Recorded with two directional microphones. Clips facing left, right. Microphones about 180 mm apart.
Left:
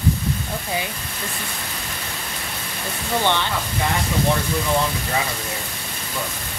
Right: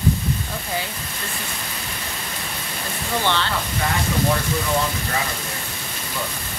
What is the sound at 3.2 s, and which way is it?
Speech, 15° left (ahead or behind).